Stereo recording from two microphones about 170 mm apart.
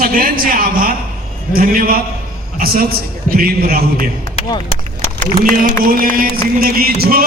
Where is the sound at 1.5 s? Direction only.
60° right (ahead or behind).